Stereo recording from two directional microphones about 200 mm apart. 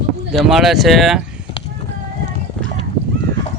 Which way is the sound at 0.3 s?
Centre (ahead or behind).